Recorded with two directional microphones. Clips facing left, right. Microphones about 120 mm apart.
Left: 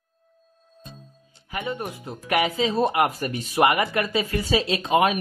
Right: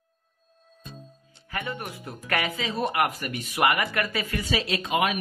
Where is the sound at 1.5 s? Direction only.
20° left (ahead or behind).